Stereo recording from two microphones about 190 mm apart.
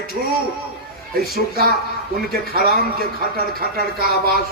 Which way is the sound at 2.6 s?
50° right (ahead or behind).